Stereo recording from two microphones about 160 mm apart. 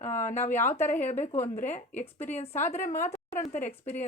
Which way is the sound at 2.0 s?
10° left (ahead or behind).